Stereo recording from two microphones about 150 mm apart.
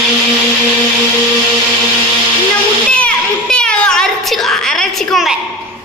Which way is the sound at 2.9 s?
5° left (ahead or behind).